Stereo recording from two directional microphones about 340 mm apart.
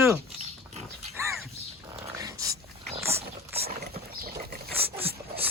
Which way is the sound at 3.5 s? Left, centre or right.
Right.